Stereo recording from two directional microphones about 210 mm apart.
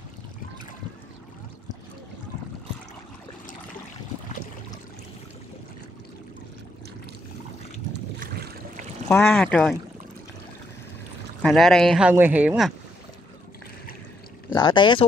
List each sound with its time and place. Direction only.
8.2 s boat: 40° right (ahead or behind)
9.1 s speech: 5° left (ahead or behind)
11.4 s speech: centre (ahead or behind)
14.5 s speech: 20° left (ahead or behind)